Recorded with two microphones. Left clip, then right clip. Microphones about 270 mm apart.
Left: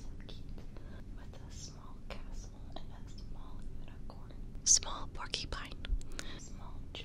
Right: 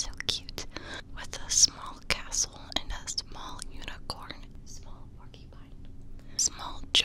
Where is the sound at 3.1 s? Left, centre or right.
Right.